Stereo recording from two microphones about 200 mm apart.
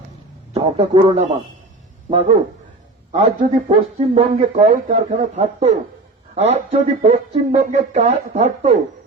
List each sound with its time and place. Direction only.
0.5 s speech: 30° right (ahead or behind)
3.7 s speech: 30° right (ahead or behind)